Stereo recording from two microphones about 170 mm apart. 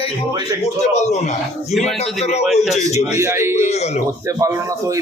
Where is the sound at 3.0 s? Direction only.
15° right (ahead or behind).